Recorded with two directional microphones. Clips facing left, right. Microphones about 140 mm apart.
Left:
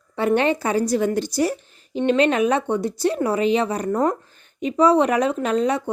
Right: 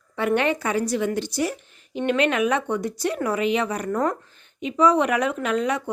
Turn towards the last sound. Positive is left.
turn(degrees=30)  # may be behind; listen again after turning